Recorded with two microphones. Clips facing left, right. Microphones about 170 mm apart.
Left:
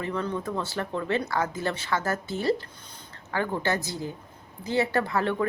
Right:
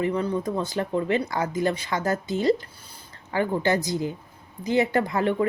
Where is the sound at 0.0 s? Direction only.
15° right (ahead or behind).